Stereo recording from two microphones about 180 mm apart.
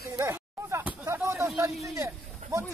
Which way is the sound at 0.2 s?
15° right (ahead or behind).